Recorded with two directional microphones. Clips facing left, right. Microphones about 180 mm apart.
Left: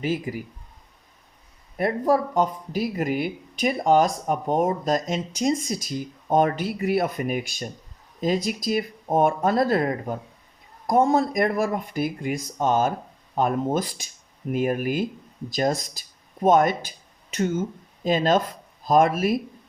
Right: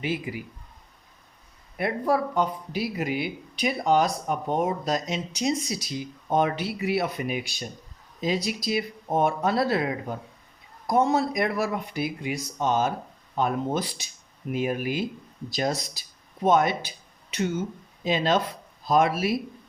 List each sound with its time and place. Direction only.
0.0 s speech: 40° left (ahead or behind)
1.8 s speech: 40° left (ahead or behind)